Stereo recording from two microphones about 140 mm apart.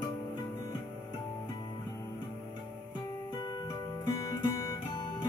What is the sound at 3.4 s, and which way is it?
Music, 30° left (ahead or behind).